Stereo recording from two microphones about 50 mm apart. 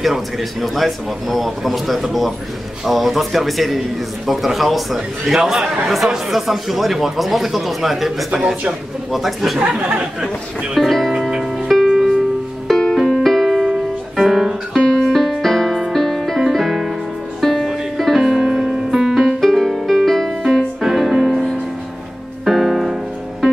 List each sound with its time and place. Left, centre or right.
0.0 s speech: centre
8.4 s speech: centre
9.1 s speech: centre
11.7 s music: centre
12.6 s music: centre
14.8 s music: centre
18.2 s piano: centre
19.4 s music: centre